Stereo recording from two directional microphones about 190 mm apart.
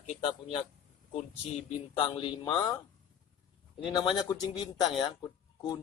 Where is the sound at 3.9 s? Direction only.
20° left (ahead or behind).